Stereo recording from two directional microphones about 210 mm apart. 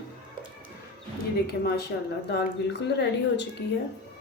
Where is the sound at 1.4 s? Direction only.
50° left (ahead or behind).